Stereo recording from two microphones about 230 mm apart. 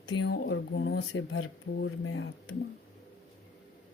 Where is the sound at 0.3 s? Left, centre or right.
Left.